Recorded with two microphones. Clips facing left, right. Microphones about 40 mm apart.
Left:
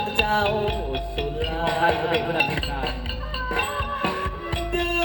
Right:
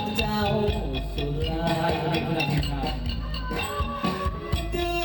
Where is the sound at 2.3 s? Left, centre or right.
Left.